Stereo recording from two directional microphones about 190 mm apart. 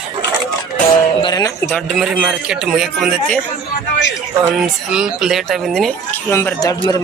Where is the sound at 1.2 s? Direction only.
20° left (ahead or behind).